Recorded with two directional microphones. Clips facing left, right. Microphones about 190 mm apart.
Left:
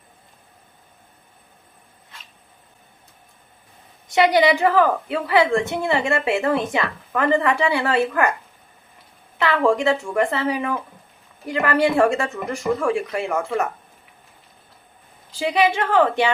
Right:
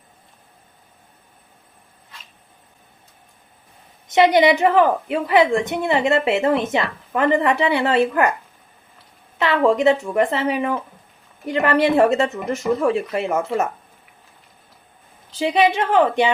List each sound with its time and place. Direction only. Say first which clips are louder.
4.1 s a woman's voice: right 2 dB; 20° right (ahead or behind)
9.4 s a woman's voice: right 2 dB; 20° right (ahead or behind)
15.4 s a woman's voice: right 2 dB; 20° right (ahead or behind)